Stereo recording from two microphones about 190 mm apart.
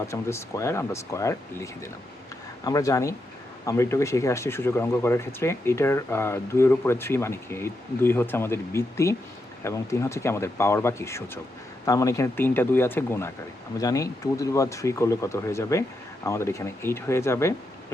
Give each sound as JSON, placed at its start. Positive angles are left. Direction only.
{"t": 0.1, "sound": "speech", "side_deg": 15}